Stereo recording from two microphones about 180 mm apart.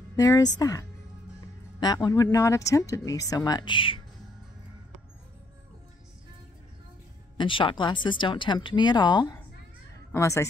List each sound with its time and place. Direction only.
0.1 s speech: 20° left (ahead or behind)
7.3 s a woman's voice: 30° left (ahead or behind)